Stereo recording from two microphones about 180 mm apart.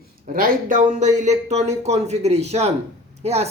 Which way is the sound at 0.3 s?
50° right (ahead or behind).